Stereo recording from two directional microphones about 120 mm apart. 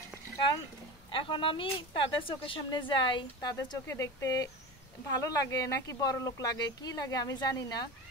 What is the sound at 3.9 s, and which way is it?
Speech, 25° left (ahead or behind).